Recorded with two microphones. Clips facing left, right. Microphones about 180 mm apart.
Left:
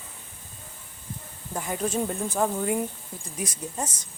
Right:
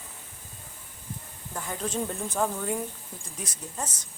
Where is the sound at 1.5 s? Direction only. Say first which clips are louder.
Left 4 dB; 15° left (ahead or behind).